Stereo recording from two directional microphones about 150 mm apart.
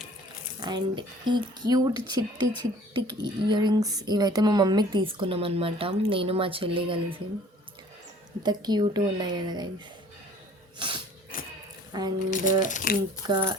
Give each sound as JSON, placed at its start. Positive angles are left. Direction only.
{"t": 0.6, "sound": "speech", "side_deg": -30}
{"t": 8.4, "sound": "speech", "side_deg": -30}
{"t": 10.8, "sound": "a sound", "side_deg": -35}
{"t": 11.3, "sound": "a sound", "side_deg": 65}
{"t": 11.9, "sound": "speech", "side_deg": -25}
{"t": 12.3, "sound": "speech", "side_deg": 60}
{"t": 13.2, "sound": "speech", "side_deg": -30}